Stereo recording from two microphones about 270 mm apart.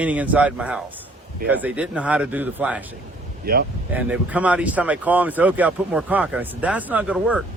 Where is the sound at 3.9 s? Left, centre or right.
Centre.